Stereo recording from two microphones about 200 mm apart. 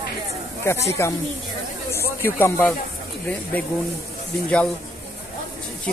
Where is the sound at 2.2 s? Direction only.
10° left (ahead or behind).